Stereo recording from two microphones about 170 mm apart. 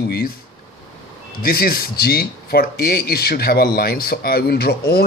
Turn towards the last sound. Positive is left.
turn(degrees=65)  # may be behind; listen again after turning